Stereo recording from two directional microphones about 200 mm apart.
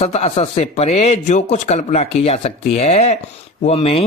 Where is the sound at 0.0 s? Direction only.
30° left (ahead or behind).